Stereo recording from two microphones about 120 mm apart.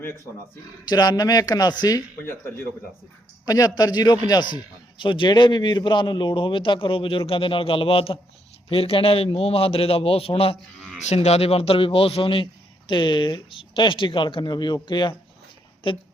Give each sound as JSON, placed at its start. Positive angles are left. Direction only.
{"t": 0.9, "sound": "a man's voice", "side_deg": 35}
{"t": 2.2, "sound": "speech", "side_deg": 20}
{"t": 3.4, "sound": "a man's voice", "side_deg": 30}
{"t": 10.9, "sound": "a man's voice", "side_deg": 70}